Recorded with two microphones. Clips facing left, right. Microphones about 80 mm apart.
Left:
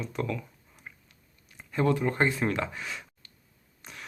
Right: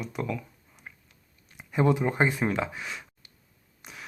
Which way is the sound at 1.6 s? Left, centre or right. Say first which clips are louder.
Right 2 dB; centre.